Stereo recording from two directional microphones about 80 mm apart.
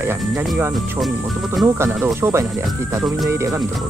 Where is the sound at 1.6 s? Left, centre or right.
Right.